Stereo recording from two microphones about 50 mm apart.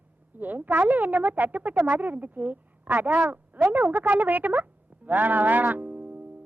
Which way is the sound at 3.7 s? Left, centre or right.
Right.